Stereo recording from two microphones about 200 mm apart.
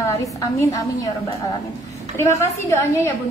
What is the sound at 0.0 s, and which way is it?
A woman's voice, 15° left (ahead or behind).